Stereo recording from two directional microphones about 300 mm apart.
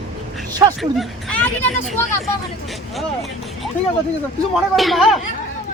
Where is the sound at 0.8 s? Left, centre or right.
Centre.